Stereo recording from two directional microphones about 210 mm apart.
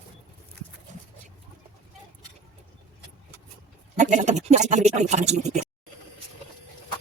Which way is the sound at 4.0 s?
35° right (ahead or behind).